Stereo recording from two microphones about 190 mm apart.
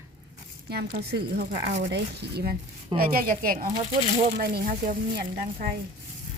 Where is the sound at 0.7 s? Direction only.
60° right (ahead or behind).